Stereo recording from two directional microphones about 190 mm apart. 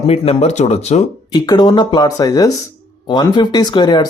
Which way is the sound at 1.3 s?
25° left (ahead or behind).